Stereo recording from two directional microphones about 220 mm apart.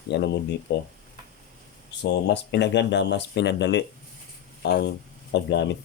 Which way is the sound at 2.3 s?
50° left (ahead or behind).